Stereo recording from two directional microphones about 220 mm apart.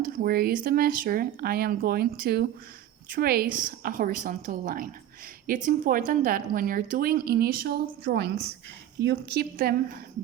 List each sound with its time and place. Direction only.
0.0 s a woman's voice: 40° right (ahead or behind)